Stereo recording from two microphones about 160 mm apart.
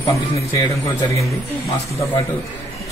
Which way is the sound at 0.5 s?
25° left (ahead or behind).